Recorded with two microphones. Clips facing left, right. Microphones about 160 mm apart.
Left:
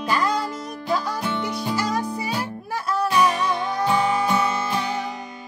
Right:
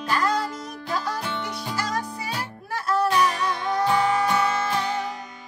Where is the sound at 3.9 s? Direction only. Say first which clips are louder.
Left 2 dB; 20° left (ahead or behind).